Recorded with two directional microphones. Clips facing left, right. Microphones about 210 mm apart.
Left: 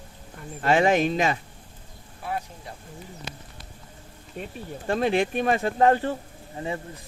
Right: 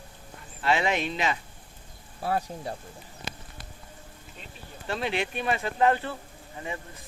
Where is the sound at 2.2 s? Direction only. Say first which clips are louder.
Right 3 dB; 35° right (ahead or behind).